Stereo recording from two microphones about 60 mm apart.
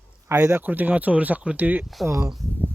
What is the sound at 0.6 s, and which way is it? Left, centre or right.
Speech, right.